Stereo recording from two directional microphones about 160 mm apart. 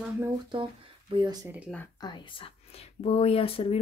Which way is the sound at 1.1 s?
25° right (ahead or behind).